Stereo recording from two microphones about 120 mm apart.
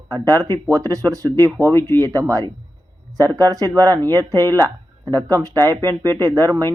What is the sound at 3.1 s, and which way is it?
Speech, 30° right (ahead or behind).